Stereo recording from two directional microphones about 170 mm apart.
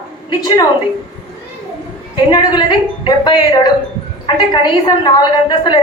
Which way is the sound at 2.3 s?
25° left (ahead or behind).